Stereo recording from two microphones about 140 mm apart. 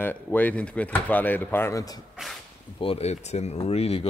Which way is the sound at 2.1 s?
Centre (ahead or behind).